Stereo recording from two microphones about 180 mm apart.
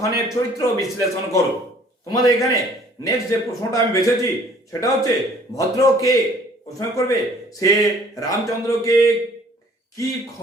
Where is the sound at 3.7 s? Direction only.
15° left (ahead or behind).